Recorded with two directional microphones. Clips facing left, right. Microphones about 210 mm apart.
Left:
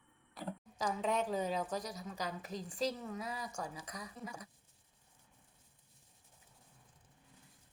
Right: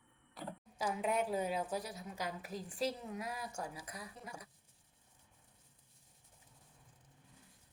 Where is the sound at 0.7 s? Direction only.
10° right (ahead or behind).